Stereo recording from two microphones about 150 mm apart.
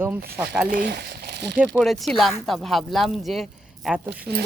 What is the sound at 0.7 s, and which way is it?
Speech, 70° right (ahead or behind).